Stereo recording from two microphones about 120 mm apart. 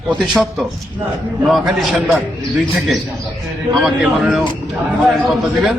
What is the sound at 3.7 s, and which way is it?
A man's voice, centre (ahead or behind).